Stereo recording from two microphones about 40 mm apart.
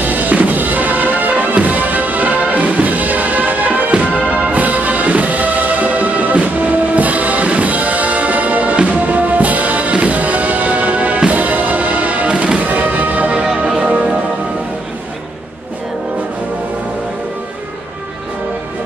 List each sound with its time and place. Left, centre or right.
0.0 s music: right